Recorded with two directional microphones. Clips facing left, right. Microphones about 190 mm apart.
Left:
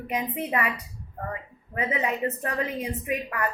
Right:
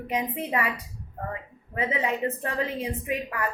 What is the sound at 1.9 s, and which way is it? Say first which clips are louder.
Speech: left 1 dB; 30° right (ahead or behind).